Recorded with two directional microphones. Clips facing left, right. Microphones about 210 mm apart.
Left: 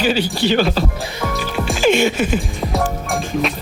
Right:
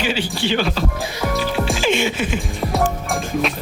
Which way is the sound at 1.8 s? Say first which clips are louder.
Left 7 dB; 45° left (ahead or behind).